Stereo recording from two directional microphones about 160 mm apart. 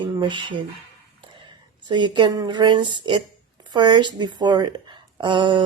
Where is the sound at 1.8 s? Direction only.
30° right (ahead or behind).